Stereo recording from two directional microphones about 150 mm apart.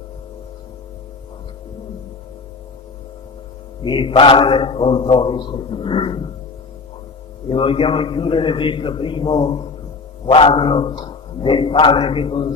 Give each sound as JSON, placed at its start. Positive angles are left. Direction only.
{"t": 3.8, "sound": "a man's voice", "side_deg": 30}
{"t": 7.4, "sound": "a man's voice", "side_deg": 35}